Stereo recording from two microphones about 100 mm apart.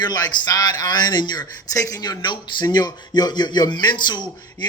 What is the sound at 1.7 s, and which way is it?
A man's voice, 35° left (ahead or behind).